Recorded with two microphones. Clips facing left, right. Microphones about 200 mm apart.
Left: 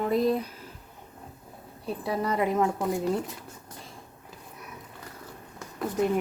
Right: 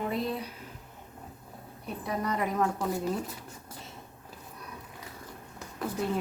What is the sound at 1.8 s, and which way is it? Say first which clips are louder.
A woman's voice: left 4 dB; 30° left (ahead or behind).